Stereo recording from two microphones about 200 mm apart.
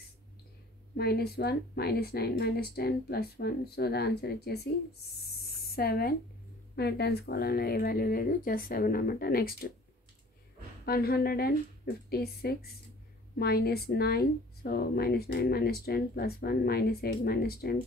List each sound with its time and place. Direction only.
0.9 s speech: 50° left (ahead or behind)
10.9 s speech: 50° left (ahead or behind)